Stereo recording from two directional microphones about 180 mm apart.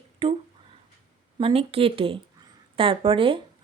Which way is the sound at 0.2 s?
30° right (ahead or behind).